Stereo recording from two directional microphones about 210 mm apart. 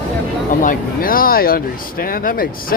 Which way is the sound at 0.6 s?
45° left (ahead or behind).